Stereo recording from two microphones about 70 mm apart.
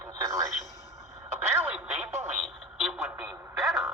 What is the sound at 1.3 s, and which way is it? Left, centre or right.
Music, right.